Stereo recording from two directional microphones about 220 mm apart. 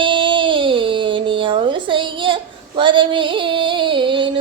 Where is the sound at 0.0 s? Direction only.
20° right (ahead or behind).